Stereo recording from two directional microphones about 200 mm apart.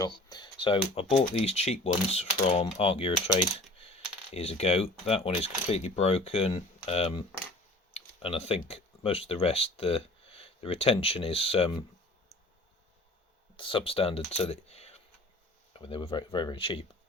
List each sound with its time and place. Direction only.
0.0 s speech: 20° left (ahead or behind)
2.7 s typing: 30° left (ahead or behind)
4.4 s speech: 30° left (ahead or behind)
13.6 s speech: 25° left (ahead or behind)